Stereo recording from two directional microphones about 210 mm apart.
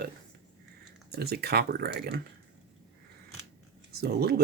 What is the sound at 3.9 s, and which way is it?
Speech, 50° right (ahead or behind).